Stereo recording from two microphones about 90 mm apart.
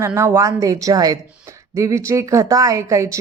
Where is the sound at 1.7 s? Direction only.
35° right (ahead or behind).